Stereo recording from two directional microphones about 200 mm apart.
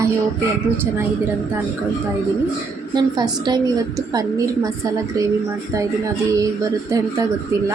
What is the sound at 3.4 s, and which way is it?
Speech, 20° right (ahead or behind).